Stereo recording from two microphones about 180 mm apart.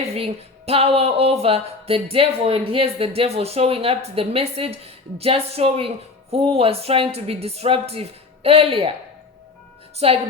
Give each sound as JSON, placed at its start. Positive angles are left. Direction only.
{"t": 0.0, "sound": "music", "side_deg": -35}
{"t": 10.0, "sound": "music", "side_deg": -35}